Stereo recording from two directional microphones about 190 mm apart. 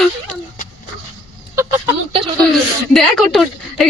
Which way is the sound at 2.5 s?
Centre (ahead or behind).